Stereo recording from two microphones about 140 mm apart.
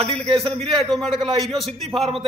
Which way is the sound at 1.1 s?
40° right (ahead or behind).